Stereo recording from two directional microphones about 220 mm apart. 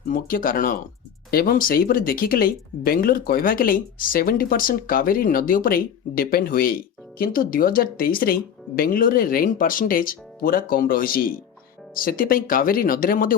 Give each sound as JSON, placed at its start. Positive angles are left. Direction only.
{"t": 0.1, "sound": "speech", "side_deg": 40}